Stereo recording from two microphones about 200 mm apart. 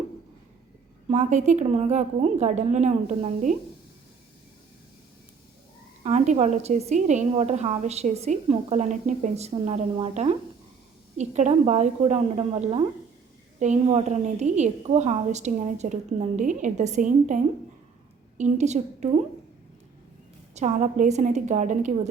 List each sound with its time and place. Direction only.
1.0 s a woman's voice: 35° right (ahead or behind)
6.0 s a woman's voice: 35° right (ahead or behind)
20.6 s a woman's voice: 35° right (ahead or behind)